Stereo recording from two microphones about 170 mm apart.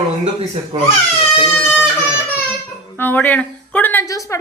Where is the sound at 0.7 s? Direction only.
30° right (ahead or behind).